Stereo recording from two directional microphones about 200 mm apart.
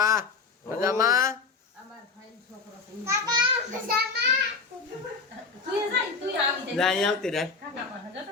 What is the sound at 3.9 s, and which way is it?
Speech, 50° right (ahead or behind).